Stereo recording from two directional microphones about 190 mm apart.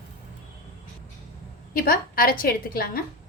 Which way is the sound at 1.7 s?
50° left (ahead or behind).